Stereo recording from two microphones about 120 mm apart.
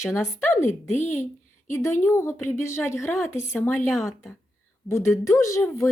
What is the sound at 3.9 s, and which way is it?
Speech, centre (ahead or behind).